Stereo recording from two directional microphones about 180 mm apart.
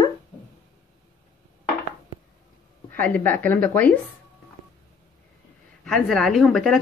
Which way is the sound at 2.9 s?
10° left (ahead or behind).